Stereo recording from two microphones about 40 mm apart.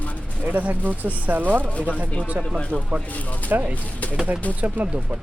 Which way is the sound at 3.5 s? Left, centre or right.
Right.